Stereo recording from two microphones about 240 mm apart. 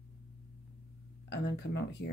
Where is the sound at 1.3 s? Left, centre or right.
Left.